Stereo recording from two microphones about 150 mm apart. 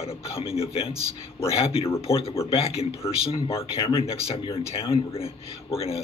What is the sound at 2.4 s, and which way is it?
Speech, 40° left (ahead or behind).